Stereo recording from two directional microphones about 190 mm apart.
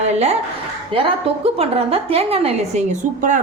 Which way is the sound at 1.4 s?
30° right (ahead or behind).